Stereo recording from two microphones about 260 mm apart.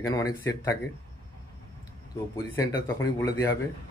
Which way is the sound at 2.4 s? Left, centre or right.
Centre.